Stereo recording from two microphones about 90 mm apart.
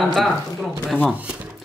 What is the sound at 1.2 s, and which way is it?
Speech, 15° right (ahead or behind).